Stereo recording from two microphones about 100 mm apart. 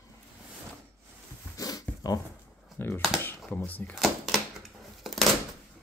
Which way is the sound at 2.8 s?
20° left (ahead or behind).